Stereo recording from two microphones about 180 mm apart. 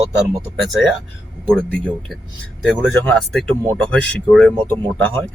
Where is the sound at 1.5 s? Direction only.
5° left (ahead or behind).